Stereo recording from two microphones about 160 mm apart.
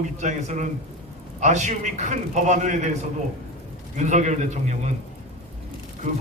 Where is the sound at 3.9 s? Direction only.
50° right (ahead or behind).